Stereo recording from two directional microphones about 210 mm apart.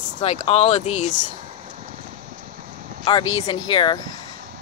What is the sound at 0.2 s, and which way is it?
Speech, 30° left (ahead or behind).